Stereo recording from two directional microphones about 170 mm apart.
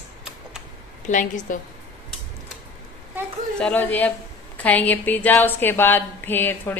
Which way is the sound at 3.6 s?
10° left (ahead or behind).